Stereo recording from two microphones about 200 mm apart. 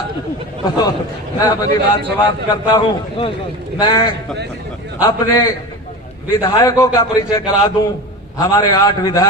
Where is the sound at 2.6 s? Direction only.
25° left (ahead or behind).